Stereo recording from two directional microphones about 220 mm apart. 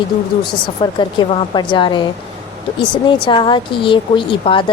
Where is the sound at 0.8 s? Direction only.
25° left (ahead or behind).